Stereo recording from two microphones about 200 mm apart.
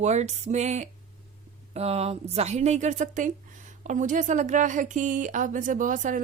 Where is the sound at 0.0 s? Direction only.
35° right (ahead or behind).